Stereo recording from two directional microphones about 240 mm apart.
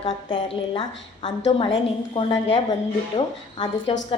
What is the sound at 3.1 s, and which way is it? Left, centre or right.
Speech, centre.